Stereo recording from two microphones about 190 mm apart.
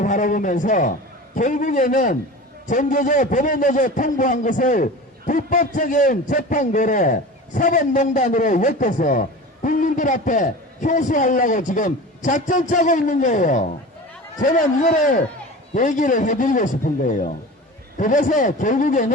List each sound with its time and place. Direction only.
0.0 s a man's voice: 45° left (ahead or behind)